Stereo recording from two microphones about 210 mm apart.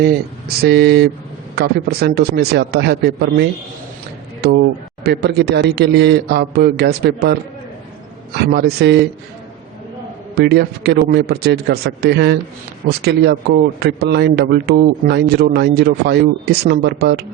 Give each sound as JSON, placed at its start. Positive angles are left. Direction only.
{"t": 0.0, "sound": "a man's voice", "side_deg": -50}
{"t": 4.4, "sound": "a sound", "side_deg": -50}
{"t": 5.0, "sound": "a man's voice", "side_deg": -50}
{"t": 8.4, "sound": "a man's voice", "side_deg": -50}
{"t": 10.3, "sound": "a man's voice", "side_deg": -50}